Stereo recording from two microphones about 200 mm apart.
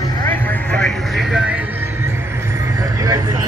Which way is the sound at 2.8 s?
15° right (ahead or behind).